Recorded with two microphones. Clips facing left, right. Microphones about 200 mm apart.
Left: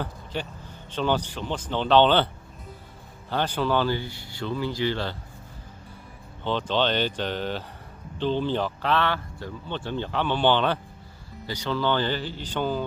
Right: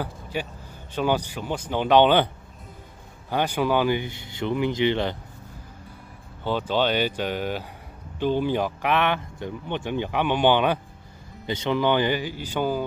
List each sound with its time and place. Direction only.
0.0 s a sound: 10° right (ahead or behind)
0.9 s speech: 10° right (ahead or behind)
3.3 s speech: 10° right (ahead or behind)
6.4 s speech: 10° right (ahead or behind)